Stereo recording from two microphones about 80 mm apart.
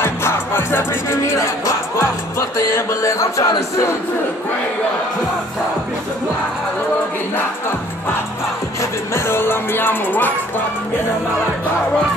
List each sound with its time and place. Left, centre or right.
0.0 s music: left
2.5 s music: left
9.1 s music: left